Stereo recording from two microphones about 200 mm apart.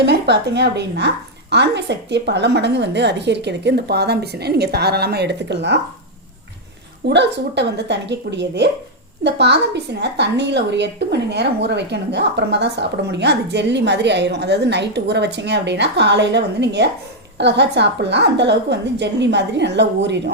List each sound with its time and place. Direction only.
0.0 s a woman's voice: 55° right (ahead or behind)
7.1 s a woman's voice: 60° right (ahead or behind)